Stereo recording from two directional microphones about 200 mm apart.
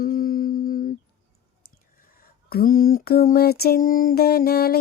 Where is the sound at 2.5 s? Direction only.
45° left (ahead or behind).